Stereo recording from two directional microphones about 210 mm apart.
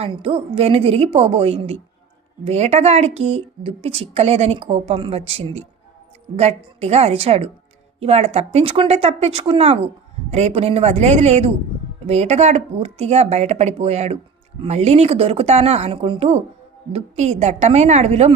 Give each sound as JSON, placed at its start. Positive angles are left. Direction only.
{"t": 0.0, "sound": "a woman's voice", "side_deg": -25}